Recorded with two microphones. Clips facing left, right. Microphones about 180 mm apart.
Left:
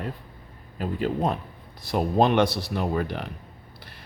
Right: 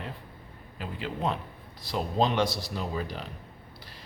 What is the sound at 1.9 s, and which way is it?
Speech, 55° left (ahead or behind).